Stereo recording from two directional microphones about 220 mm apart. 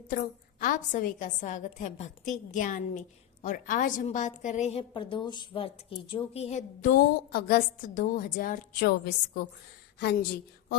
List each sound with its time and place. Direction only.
0.6 s a woman's voice: 40° left (ahead or behind)